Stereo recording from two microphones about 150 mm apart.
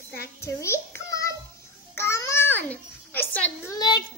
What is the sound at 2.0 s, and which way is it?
Babbling, 20° left (ahead or behind).